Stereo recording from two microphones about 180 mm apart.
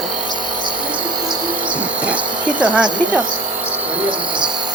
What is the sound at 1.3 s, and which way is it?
Insect, 5° right (ahead or behind).